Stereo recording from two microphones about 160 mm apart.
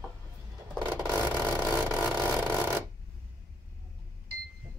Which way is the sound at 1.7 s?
10° right (ahead or behind).